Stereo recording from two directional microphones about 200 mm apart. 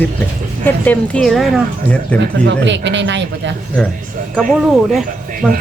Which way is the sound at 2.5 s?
60° right (ahead or behind).